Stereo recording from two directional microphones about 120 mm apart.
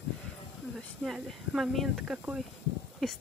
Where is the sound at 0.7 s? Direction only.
Centre (ahead or behind).